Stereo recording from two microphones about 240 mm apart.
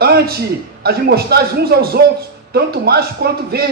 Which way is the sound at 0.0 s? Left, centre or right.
Right.